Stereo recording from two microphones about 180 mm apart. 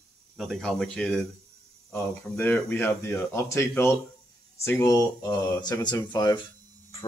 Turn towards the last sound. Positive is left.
turn(degrees=20)  # may be behind; listen again after turning